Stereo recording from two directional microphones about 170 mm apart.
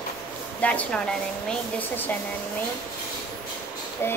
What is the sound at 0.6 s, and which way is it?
A woman's voice, 5° left (ahead or behind).